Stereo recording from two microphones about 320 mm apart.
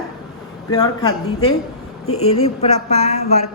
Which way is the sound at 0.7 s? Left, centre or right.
Centre.